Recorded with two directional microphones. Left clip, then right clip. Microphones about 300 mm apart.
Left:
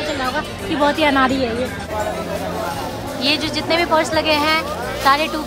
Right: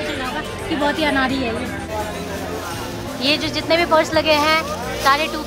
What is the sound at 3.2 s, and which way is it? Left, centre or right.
Speech, centre.